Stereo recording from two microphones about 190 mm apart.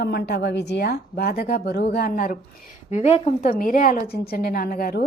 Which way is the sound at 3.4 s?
50° left (ahead or behind).